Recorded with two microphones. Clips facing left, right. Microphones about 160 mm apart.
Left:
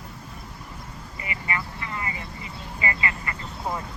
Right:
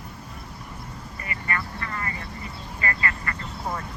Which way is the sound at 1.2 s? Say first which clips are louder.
Even; 15° left (ahead or behind).